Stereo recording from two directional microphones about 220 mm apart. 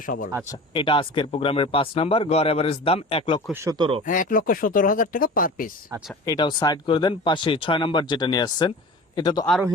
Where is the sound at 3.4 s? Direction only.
10° right (ahead or behind).